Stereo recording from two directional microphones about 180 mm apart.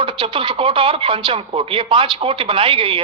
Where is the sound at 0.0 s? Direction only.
30° right (ahead or behind).